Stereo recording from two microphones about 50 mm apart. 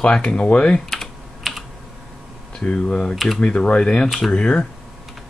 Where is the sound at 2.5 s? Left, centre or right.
Left.